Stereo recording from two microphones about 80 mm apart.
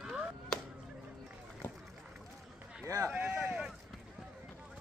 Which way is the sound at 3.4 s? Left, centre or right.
Centre.